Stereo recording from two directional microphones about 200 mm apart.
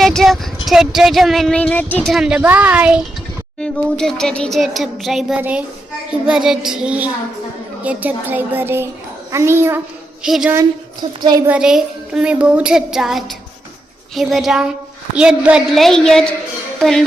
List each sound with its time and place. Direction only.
0.0 s speech: centre (ahead or behind)
3.6 s speech: 5° left (ahead or behind)
11.2 s a woman's voice: 20° right (ahead or behind)
11.4 s speech: 5° right (ahead or behind)